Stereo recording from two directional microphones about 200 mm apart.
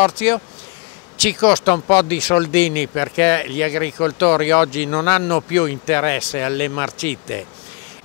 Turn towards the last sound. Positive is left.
turn(degrees=15)  # may be behind; listen again after turning